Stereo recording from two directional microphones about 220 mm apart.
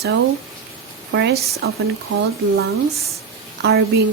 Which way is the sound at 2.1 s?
60° right (ahead or behind).